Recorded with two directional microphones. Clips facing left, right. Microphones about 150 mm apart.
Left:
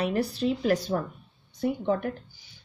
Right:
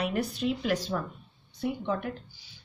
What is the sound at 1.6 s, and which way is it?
Speech, 50° left (ahead or behind).